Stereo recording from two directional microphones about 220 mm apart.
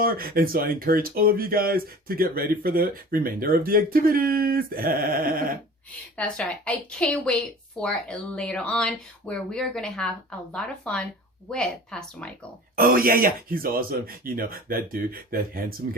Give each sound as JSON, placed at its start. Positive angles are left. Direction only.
{"t": 0.0, "sound": "speech", "side_deg": -40}
{"t": 6.1, "sound": "speech", "side_deg": 5}
{"t": 12.7, "sound": "speech", "side_deg": -40}